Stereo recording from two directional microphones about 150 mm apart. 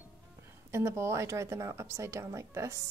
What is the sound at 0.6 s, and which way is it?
A woman's voice, 20° right (ahead or behind).